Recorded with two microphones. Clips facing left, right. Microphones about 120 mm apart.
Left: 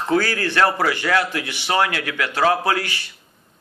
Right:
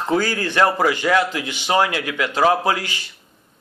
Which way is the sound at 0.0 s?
20° right (ahead or behind).